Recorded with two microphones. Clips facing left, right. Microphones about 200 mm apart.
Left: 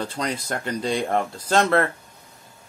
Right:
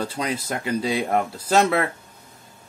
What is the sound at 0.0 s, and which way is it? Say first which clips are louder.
Speech: right 1 dB; 5° right (ahead or behind).